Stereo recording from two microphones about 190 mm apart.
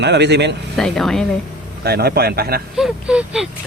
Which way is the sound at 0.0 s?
60° right (ahead or behind).